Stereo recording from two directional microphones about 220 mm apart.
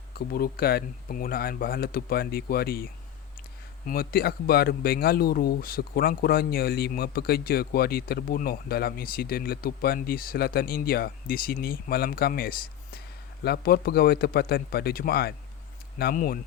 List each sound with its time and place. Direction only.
0.1 s speech: 45° left (ahead or behind)